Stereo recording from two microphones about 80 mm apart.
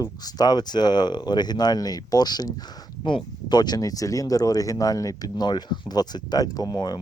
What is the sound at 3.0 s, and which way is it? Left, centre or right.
Speech, left.